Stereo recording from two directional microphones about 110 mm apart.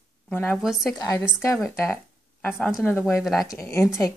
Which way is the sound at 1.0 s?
30° left (ahead or behind).